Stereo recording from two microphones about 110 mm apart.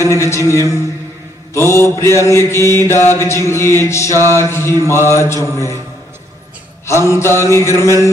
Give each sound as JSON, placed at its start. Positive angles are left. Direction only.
{"t": 0.1, "sound": "mantra", "side_deg": 25}
{"t": 6.9, "sound": "mantra", "side_deg": 25}